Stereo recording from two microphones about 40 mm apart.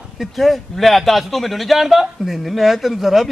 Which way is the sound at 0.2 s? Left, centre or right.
Centre.